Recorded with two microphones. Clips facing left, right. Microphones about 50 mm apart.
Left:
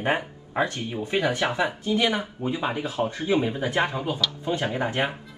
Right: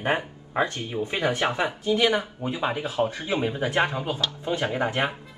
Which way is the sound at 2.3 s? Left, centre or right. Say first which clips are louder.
Even; centre.